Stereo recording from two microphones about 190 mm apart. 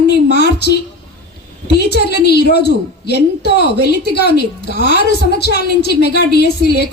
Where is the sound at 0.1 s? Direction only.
60° left (ahead or behind).